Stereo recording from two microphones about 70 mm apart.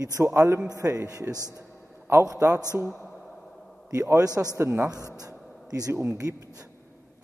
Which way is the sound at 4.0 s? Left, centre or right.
Right.